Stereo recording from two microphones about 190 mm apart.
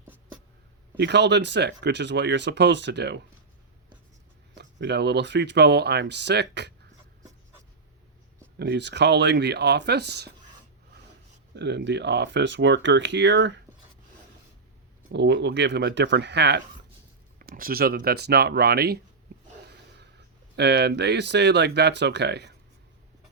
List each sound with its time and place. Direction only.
0.9 s speech: 65° right (ahead or behind)
4.5 s speech: 65° right (ahead or behind)
8.5 s speech: 65° right (ahead or behind)
11.5 s speech: 65° right (ahead or behind)
15.1 s speech: 65° right (ahead or behind)
17.4 s speech: 50° right (ahead or behind)
20.6 s speech: 60° right (ahead or behind)